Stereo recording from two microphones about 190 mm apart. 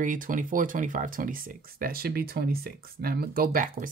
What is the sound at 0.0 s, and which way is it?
Speech, 45° right (ahead or behind).